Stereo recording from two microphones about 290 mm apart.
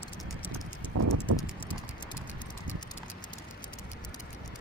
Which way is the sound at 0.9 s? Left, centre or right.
Right.